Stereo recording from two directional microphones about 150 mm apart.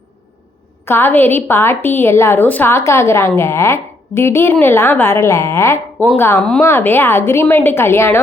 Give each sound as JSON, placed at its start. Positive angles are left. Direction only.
{"t": 0.9, "sound": "a woman's voice", "side_deg": 15}